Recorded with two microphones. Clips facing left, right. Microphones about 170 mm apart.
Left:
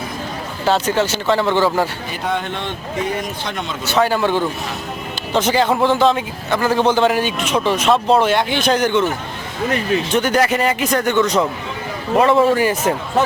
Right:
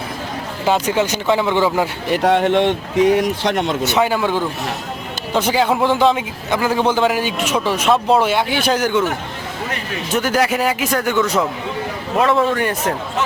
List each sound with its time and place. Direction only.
0.6 s a man's voice: 10° right (ahead or behind)
2.0 s speech: 75° right (ahead or behind)
3.9 s a man's voice: 10° right (ahead or behind)
10.1 s a man's voice: 5° right (ahead or behind)